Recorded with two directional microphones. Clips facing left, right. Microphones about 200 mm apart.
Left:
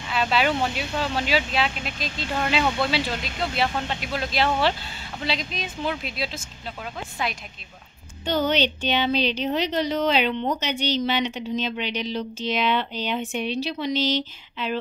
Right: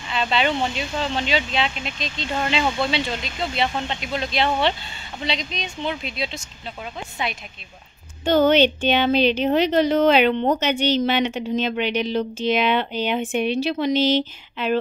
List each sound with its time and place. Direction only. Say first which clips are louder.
0.1 s speech: right 1 dB; 5° left (ahead or behind)
8.2 s speech: right 7 dB; 50° right (ahead or behind)